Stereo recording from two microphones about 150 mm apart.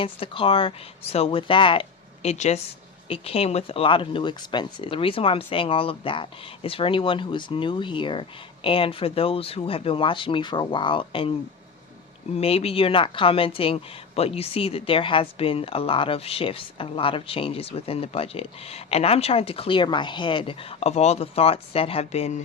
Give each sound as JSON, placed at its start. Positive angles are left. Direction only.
{"t": 0.0, "sound": "speech", "side_deg": 35}
{"t": 12.4, "sound": "speech", "side_deg": 40}